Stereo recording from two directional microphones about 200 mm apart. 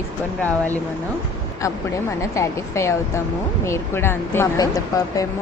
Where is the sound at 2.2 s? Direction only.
15° left (ahead or behind).